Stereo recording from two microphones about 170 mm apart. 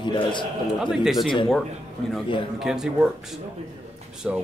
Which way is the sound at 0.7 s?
Centre (ahead or behind).